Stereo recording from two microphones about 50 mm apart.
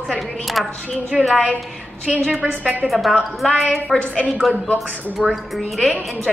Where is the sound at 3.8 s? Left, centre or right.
Centre.